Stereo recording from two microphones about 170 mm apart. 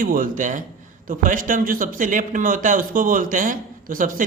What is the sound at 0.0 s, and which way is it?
A man's voice, 55° right (ahead or behind).